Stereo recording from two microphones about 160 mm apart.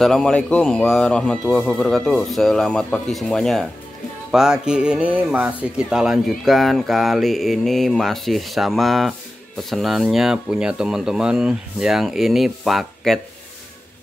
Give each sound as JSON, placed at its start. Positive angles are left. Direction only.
{"t": 0.0, "sound": "speech", "side_deg": 5}